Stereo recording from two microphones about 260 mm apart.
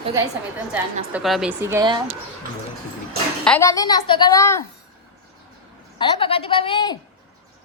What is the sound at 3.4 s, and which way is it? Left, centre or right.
A woman's voice, centre.